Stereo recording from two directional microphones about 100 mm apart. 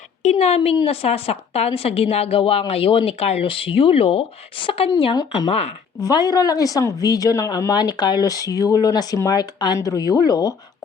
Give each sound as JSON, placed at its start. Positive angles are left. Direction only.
{"t": 0.3, "sound": "a woman's voice", "side_deg": 90}
{"t": 5.5, "sound": "speech", "side_deg": 90}
{"t": 6.1, "sound": "speech", "side_deg": 40}